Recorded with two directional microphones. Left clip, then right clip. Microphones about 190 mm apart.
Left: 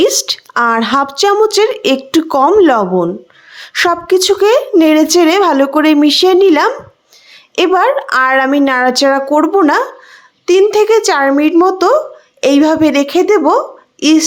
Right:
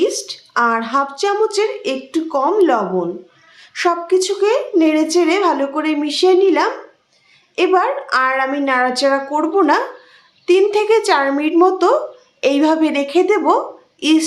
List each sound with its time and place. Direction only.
0.0 s speech: 50° left (ahead or behind)